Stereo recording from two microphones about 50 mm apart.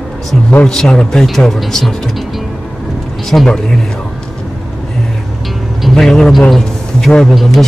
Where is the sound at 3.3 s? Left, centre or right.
Left.